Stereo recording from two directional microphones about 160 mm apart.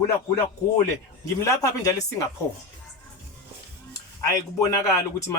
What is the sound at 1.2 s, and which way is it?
Speech, 20° left (ahead or behind).